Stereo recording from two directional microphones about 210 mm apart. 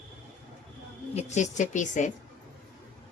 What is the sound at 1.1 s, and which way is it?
Speech, 35° left (ahead or behind).